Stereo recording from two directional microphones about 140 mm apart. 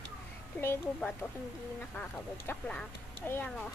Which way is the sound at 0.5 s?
15° left (ahead or behind).